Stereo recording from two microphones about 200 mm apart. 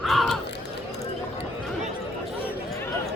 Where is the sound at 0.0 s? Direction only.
Centre (ahead or behind).